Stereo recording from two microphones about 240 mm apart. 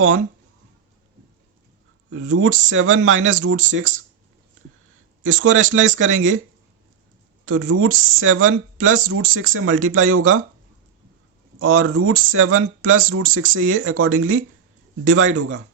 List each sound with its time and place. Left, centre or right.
2.0 s speech: right
5.2 s speech: right
7.4 s speech: right
11.6 s speech: right